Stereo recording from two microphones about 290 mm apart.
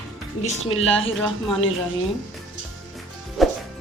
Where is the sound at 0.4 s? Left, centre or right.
Left.